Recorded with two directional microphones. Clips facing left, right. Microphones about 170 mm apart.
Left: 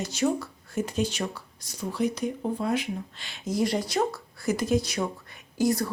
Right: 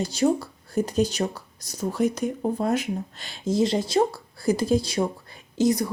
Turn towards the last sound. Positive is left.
turn(degrees=-20)  # may be behind; listen again after turning